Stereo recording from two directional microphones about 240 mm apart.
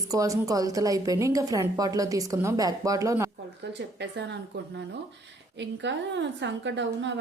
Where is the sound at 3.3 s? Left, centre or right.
Right.